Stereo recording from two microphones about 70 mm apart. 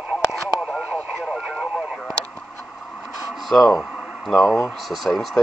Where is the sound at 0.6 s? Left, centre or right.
Centre.